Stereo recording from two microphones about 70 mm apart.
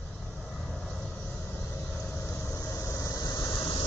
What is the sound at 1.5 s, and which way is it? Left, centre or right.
Vehicle, left.